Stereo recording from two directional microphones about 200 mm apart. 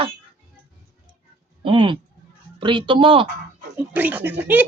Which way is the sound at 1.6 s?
25° right (ahead or behind).